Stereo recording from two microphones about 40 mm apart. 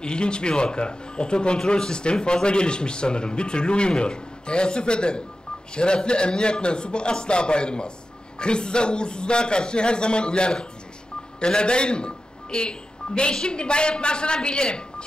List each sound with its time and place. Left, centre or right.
0.0 s a man's voice: left